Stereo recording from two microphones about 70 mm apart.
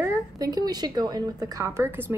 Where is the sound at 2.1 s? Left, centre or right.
Right.